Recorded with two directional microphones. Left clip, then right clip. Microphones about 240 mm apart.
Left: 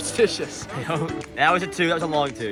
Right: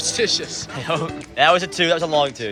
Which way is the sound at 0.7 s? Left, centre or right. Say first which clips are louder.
Right 4 dB; centre.